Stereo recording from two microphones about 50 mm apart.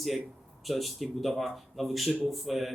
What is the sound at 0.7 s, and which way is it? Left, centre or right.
Speech, centre.